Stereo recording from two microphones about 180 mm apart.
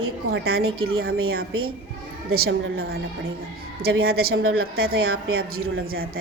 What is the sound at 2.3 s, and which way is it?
A woman's voice, 60° right (ahead or behind).